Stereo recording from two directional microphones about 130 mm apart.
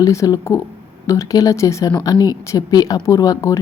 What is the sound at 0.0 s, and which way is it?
Speech, 25° left (ahead or behind).